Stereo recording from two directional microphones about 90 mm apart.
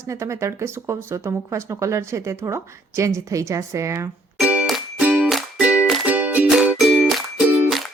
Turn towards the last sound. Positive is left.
turn(degrees=-5)  # may be behind; listen again after turning